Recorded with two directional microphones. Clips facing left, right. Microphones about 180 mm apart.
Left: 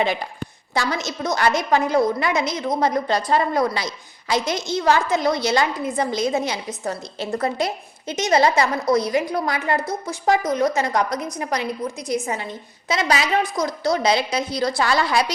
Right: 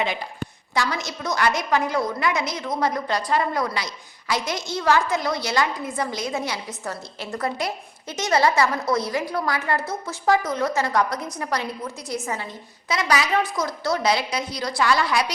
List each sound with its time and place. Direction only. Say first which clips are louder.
0.7 s a woman's voice: left 2 dB; 25° left (ahead or behind)